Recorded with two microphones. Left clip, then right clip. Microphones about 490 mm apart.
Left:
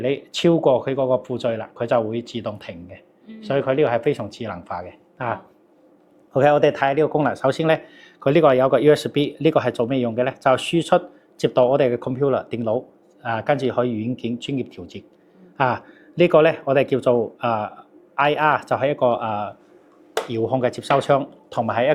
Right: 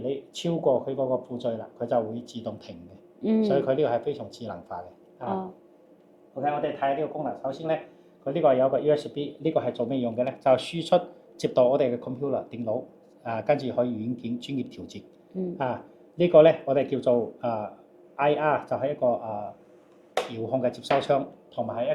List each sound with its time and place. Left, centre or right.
0.0 s speech: left
6.3 s speech: left
8.2 s speech: left